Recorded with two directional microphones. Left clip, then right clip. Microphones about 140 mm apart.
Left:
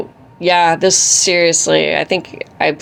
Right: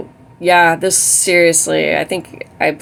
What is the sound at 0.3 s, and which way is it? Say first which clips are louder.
Speech: right 1 dB; 40° left (ahead or behind).